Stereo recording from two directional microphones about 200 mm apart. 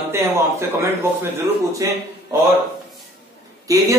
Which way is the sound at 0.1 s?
15° right (ahead or behind).